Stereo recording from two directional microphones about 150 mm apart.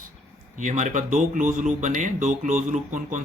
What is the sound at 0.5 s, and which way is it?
Speech, 55° right (ahead or behind).